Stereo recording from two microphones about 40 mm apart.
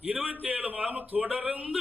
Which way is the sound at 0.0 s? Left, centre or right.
Right.